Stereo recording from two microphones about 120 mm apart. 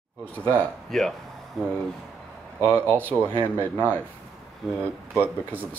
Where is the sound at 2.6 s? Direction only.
10° left (ahead or behind).